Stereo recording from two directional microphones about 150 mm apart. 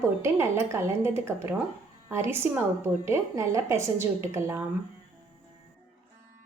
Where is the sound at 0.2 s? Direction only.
20° right (ahead or behind).